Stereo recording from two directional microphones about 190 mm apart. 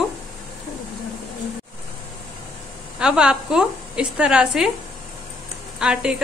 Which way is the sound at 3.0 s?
5° right (ahead or behind).